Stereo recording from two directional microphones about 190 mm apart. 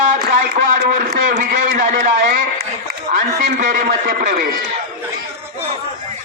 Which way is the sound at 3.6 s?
45° right (ahead or behind).